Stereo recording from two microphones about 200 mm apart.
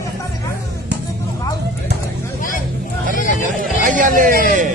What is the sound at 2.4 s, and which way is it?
Vehicle, 45° left (ahead or behind).